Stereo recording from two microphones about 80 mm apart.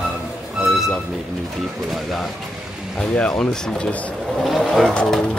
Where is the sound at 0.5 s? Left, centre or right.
Centre.